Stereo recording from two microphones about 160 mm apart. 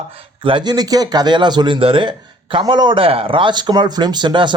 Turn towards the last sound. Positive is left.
turn(degrees=-30)  # may be behind; listen again after turning